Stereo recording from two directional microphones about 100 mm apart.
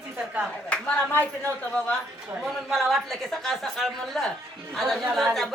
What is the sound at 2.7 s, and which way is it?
A man's voice, centre (ahead or behind).